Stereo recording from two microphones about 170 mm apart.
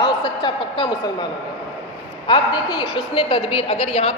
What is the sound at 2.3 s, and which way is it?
A woman's voice, 30° left (ahead or behind).